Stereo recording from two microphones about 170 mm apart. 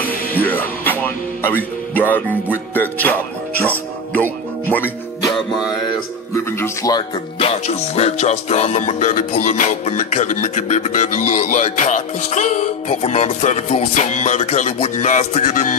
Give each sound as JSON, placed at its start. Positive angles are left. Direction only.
{"t": 0.0, "sound": "music", "side_deg": 10}
{"t": 6.3, "sound": "speech", "side_deg": 20}
{"t": 7.3, "sound": "music", "side_deg": 40}